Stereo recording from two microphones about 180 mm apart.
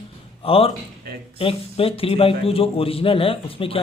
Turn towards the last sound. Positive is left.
turn(degrees=30)  # may be behind; listen again after turning